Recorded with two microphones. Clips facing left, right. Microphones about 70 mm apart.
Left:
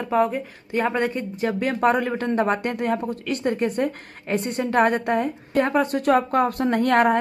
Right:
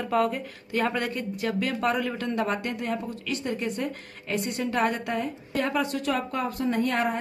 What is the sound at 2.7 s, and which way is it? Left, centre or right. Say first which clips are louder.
A woman's voice: left 6 dB; left.